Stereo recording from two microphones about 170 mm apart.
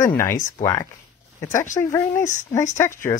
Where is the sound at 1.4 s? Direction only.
20° left (ahead or behind).